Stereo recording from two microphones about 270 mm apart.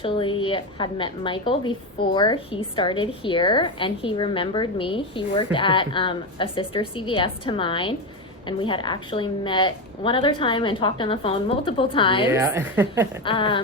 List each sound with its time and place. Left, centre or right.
0.0 s a woman's voice: centre
12.3 s a woman's voice: centre
13.2 s a woman's voice: centre